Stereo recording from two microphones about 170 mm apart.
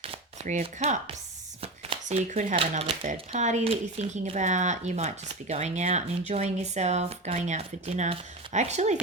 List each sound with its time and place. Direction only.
0.0 s chopping: 40° right (ahead or behind)
1.6 s a sound: 35° right (ahead or behind)
2.6 s speech: 35° right (ahead or behind)
3.0 s speech: 45° right (ahead or behind)